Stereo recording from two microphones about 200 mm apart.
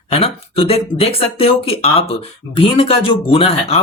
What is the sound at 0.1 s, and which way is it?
Speech, 30° left (ahead or behind).